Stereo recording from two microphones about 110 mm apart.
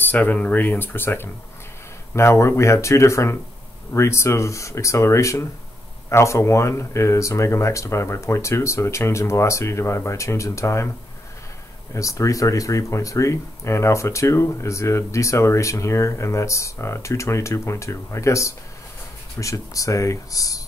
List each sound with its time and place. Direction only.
0.0 s speech: 15° left (ahead or behind)
11.9 s speech: 30° left (ahead or behind)